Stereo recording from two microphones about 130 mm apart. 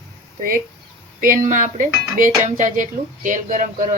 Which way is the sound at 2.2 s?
70° right (ahead or behind).